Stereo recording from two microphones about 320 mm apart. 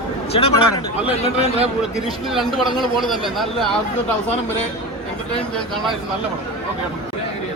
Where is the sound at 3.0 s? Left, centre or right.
Centre.